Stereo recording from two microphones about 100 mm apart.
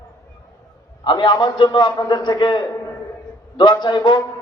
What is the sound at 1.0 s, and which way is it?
A man's voice, 50° left (ahead or behind).